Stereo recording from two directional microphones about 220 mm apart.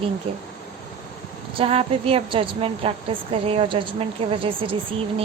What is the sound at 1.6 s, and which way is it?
A woman's voice, 25° right (ahead or behind).